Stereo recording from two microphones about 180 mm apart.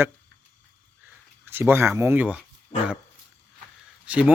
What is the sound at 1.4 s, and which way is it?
Speech, 10° right (ahead or behind).